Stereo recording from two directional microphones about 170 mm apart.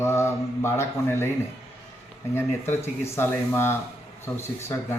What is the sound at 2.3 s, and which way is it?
A man's voice, 15° left (ahead or behind).